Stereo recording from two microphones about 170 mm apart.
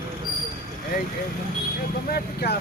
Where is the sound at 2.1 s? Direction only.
65° left (ahead or behind).